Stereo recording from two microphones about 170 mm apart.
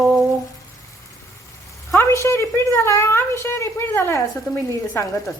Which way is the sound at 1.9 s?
15° left (ahead or behind).